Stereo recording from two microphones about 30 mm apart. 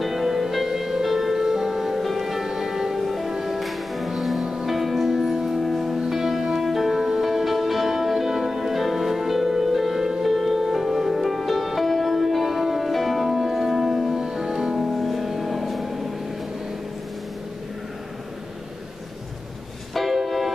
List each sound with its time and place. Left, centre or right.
0.0 s music: centre
3.5 s music: centre
4.4 s music: centre
4.6 s music: centre
5.6 s music: centre
6.0 s music: centre
6.6 s music: centre
14.1 s music: right
15.0 s music: centre
19.9 s music: centre